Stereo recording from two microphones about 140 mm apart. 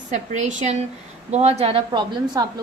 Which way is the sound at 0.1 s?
60° right (ahead or behind).